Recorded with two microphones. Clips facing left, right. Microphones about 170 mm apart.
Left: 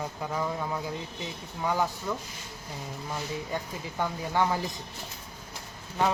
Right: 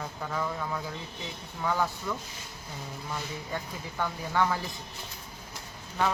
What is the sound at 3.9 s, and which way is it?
Speech, 20° left (ahead or behind).